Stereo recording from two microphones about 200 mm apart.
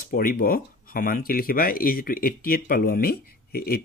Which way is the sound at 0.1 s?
45° left (ahead or behind).